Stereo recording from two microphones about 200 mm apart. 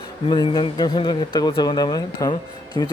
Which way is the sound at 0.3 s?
20° left (ahead or behind).